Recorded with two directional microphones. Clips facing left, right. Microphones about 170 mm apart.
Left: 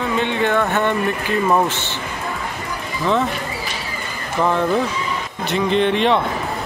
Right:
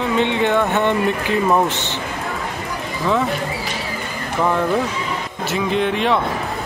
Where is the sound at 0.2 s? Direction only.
20° right (ahead or behind).